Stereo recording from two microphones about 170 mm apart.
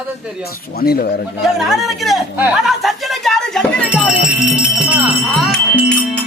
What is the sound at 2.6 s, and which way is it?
Music, centre (ahead or behind).